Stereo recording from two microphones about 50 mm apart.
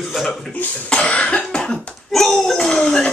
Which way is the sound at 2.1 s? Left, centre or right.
Centre.